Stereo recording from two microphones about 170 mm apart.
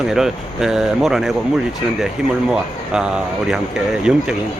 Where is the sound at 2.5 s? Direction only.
5° right (ahead or behind).